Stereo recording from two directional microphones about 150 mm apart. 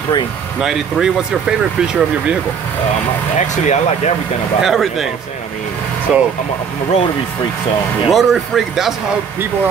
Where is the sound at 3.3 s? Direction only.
50° left (ahead or behind).